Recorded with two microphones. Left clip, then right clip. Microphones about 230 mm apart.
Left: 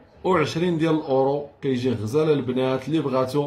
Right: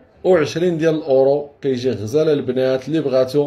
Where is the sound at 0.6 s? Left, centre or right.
Centre.